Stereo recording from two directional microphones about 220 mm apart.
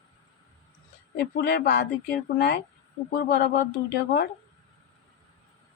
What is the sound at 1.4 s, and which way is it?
Speech, 45° left (ahead or behind).